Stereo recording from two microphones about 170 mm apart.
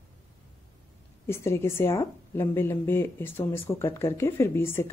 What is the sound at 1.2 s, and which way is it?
A woman's voice, 15° left (ahead or behind).